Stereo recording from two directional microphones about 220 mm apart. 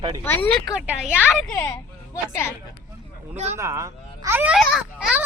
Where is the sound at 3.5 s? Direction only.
15° right (ahead or behind).